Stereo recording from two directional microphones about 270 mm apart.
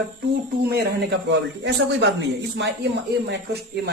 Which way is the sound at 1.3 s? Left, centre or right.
Right.